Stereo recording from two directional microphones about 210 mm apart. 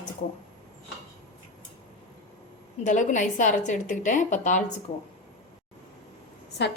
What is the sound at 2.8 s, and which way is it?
A woman's voice, 35° left (ahead or behind).